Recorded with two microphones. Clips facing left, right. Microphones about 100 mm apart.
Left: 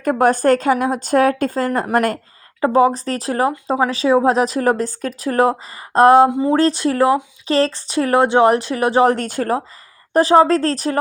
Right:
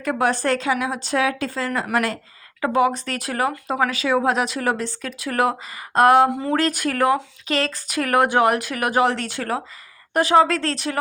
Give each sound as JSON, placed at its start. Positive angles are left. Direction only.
{"t": 0.0, "sound": "a woman's voice", "side_deg": 45}
{"t": 2.6, "sound": "a woman's voice", "side_deg": 35}
{"t": 9.0, "sound": "a woman's voice", "side_deg": 45}